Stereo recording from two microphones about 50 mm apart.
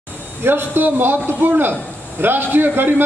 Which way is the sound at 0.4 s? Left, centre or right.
Right.